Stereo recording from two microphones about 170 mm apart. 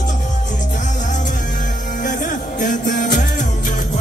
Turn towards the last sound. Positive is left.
turn(degrees=50)  # may be behind; listen again after turning